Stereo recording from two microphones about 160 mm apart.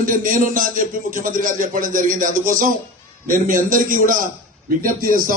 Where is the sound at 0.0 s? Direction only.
60° right (ahead or behind).